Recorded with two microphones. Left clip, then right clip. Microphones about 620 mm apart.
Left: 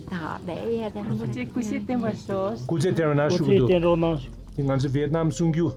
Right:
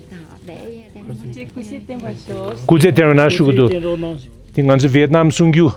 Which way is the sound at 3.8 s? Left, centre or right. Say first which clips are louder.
Right 1 dB; centre.